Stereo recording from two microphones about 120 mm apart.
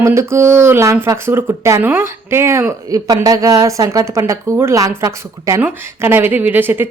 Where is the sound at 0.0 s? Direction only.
20° right (ahead or behind).